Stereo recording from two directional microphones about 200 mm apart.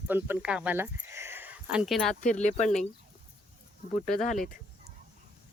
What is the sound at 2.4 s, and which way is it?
Speech, 35° left (ahead or behind).